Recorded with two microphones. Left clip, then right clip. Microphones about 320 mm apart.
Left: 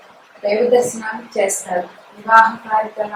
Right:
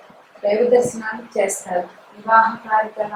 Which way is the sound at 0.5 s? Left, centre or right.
Centre.